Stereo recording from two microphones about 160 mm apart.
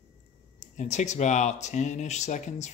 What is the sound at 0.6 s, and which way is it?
Speech, 45° left (ahead or behind).